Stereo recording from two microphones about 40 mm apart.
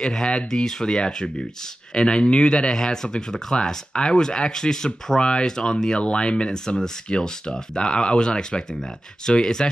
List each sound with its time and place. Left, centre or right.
0.0 s speech: centre